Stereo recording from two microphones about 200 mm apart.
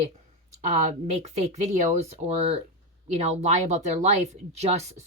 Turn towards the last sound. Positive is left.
turn(degrees=-30)  # may be behind; listen again after turning